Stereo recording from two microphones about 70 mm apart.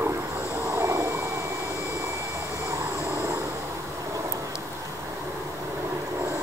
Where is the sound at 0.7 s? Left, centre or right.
Right.